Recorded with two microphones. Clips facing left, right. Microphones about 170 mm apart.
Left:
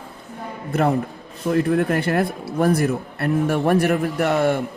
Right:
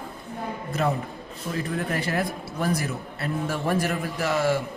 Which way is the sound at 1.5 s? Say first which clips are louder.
Left 10 dB; 60° left (ahead or behind).